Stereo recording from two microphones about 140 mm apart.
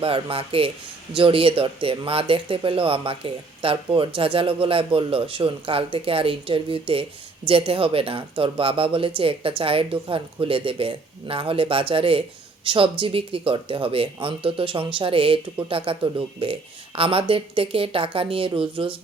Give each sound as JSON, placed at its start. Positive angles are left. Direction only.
{"t": 0.0, "sound": "speech", "side_deg": -40}